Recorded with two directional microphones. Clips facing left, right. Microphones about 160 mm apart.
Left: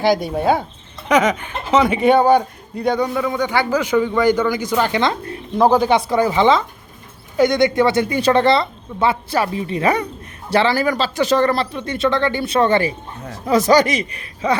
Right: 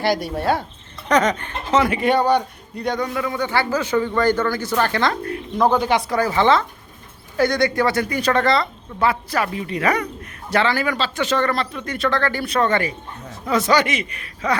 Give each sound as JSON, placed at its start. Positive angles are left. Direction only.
{"t": 0.2, "sound": "a woman's voice", "side_deg": 20}
{"t": 1.0, "sound": "speech", "side_deg": 5}
{"t": 2.1, "sound": "a man's voice", "side_deg": 50}
{"t": 3.0, "sound": "a man's voice", "side_deg": 20}
{"t": 6.1, "sound": "a man's voice", "side_deg": 20}